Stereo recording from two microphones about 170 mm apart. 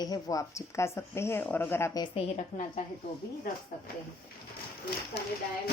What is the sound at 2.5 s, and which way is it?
Speech, 50° left (ahead or behind).